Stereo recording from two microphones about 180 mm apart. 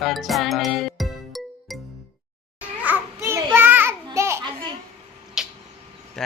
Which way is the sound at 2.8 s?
10° right (ahead or behind).